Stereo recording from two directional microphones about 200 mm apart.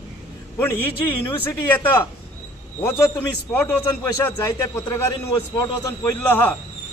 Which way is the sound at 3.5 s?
10° left (ahead or behind).